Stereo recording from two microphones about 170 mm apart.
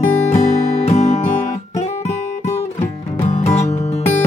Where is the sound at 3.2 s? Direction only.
40° left (ahead or behind).